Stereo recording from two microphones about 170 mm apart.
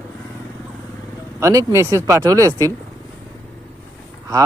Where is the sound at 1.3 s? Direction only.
20° right (ahead or behind).